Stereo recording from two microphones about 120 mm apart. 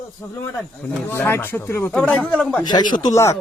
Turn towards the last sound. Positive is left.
turn(degrees=35)  # may be behind; listen again after turning